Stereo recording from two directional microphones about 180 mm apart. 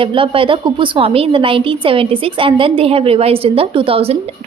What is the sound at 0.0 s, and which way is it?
A woman's voice, 30° right (ahead or behind).